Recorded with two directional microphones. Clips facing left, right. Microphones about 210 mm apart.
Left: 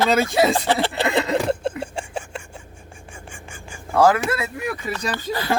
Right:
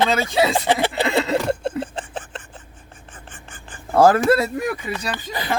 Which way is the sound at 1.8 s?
10° left (ahead or behind).